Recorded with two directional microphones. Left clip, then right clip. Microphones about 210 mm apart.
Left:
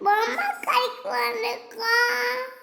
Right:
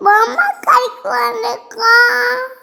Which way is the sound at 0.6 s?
30° right (ahead or behind).